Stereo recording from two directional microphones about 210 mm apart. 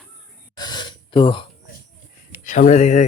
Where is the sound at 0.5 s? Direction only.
20° left (ahead or behind).